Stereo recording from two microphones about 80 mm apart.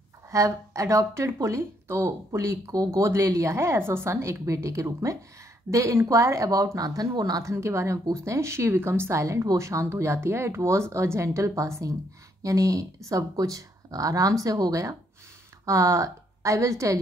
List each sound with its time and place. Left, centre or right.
0.3 s speech: right
7.5 s a woman's voice: right